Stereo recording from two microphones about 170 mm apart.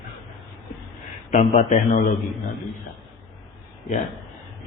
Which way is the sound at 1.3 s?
45° left (ahead or behind).